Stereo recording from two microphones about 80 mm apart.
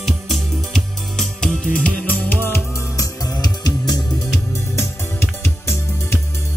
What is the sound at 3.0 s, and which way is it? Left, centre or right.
Music, left.